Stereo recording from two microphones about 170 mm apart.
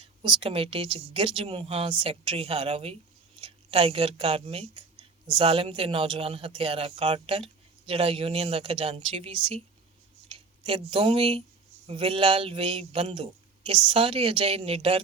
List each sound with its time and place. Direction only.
0.0 s speech: 30° right (ahead or behind)